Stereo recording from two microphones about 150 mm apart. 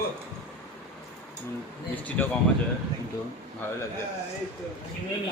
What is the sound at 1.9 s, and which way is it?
Speech, 10° left (ahead or behind).